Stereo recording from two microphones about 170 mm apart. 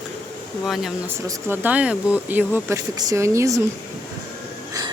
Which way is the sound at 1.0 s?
10° right (ahead or behind).